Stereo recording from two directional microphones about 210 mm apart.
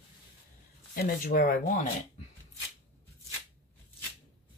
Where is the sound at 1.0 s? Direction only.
40° left (ahead or behind).